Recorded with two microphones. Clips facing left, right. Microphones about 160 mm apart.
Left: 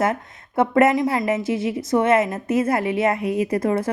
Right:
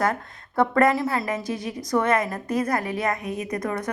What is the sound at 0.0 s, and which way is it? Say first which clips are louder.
A woman's voice: left 3 dB; 20° left (ahead or behind).